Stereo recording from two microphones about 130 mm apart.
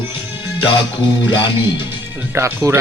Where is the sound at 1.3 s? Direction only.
35° left (ahead or behind).